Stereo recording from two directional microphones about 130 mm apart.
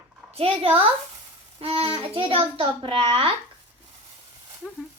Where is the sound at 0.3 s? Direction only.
45° right (ahead or behind).